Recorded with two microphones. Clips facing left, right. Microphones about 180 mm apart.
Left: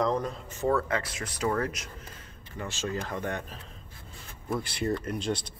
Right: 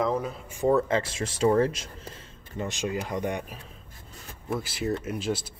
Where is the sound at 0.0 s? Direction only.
5° right (ahead or behind); by 1.9 s 30° right (ahead or behind).